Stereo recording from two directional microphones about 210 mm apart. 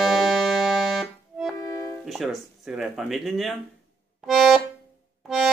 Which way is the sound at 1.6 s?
15° left (ahead or behind).